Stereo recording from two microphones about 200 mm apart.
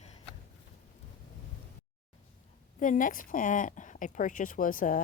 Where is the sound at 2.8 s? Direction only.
40° left (ahead or behind).